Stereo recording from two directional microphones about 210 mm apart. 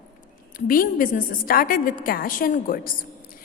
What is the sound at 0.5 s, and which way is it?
A woman's voice, 40° left (ahead or behind).